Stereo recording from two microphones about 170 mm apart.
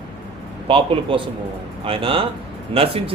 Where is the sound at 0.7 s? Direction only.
35° right (ahead or behind).